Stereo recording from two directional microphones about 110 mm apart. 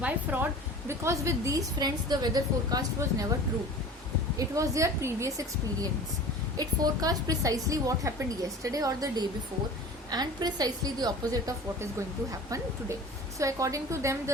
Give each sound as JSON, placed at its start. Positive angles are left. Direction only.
{"t": 0.0, "sound": "speech", "side_deg": -15}
{"t": 0.9, "sound": "a woman's voice", "side_deg": -25}
{"t": 4.4, "sound": "a woman's voice", "side_deg": -30}